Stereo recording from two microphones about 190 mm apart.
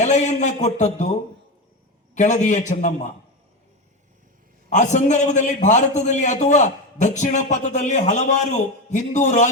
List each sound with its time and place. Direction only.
0.0 s a man's voice: 40° left (ahead or behind)
2.1 s a man's voice: 40° left (ahead or behind)
4.7 s a man's voice: 40° left (ahead or behind)